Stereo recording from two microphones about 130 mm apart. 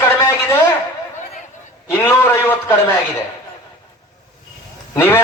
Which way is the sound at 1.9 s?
15° left (ahead or behind).